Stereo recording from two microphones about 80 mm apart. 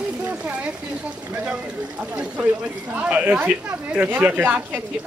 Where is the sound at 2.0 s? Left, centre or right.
Centre.